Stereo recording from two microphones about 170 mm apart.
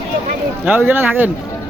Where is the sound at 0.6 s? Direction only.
10° right (ahead or behind).